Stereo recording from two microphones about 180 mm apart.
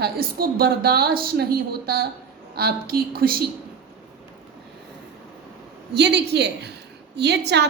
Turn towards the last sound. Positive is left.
turn(degrees=-70)  # may be behind; listen again after turning